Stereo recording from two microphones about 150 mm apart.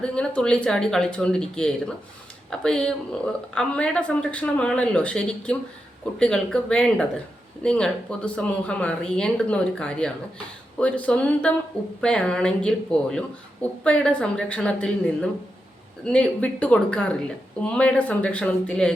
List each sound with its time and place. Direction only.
0.0 s speech: 5° left (ahead or behind)